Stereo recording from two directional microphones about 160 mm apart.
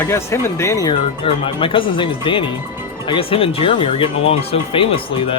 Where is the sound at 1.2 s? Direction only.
35° left (ahead or behind).